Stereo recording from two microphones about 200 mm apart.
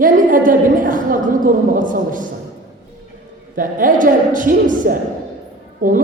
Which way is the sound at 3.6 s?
40° right (ahead or behind).